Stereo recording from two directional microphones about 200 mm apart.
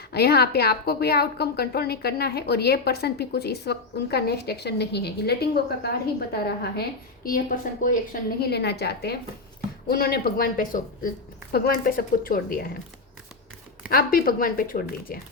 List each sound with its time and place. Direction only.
0.1 s a woman's voice: 55° left (ahead or behind)
13.8 s a woman's voice: 45° left (ahead or behind)